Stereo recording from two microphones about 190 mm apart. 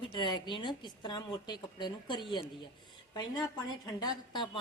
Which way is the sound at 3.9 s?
20° left (ahead or behind).